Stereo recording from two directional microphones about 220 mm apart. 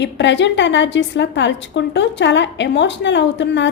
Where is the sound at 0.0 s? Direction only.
55° left (ahead or behind).